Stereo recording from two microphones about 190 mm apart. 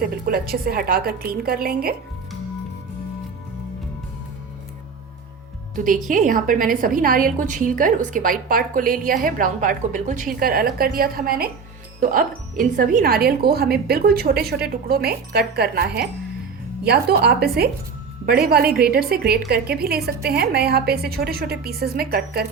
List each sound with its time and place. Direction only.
0.0 s a woman's voice: 50° right (ahead or behind)
5.7 s a woman's voice: 45° right (ahead or behind)